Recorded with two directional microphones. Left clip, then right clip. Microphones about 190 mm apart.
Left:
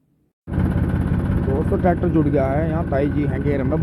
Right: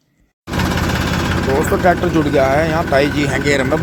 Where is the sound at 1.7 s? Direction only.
10° right (ahead or behind).